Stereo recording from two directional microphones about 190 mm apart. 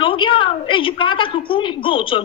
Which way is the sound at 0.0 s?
25° left (ahead or behind).